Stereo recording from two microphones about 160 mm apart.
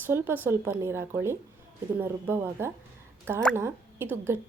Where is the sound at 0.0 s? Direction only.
15° right (ahead or behind).